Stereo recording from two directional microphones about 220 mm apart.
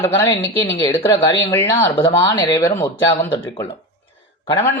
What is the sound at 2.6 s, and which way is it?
Speech, 10° left (ahead or behind).